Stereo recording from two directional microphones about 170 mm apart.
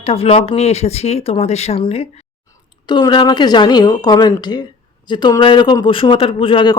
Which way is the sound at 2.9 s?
25° left (ahead or behind).